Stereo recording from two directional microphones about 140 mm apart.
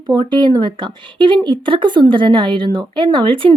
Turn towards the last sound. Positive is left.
turn(degrees=-35)  # may be behind; listen again after turning